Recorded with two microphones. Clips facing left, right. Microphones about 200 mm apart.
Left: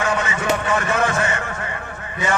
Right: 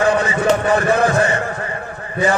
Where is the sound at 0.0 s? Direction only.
35° right (ahead or behind).